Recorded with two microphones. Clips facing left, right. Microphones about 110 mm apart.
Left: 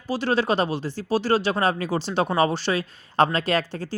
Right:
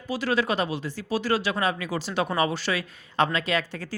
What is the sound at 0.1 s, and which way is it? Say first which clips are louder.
Speech: left 3 dB; 30° left (ahead or behind).